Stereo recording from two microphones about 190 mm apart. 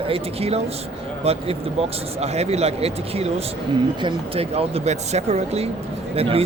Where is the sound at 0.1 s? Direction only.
30° right (ahead or behind).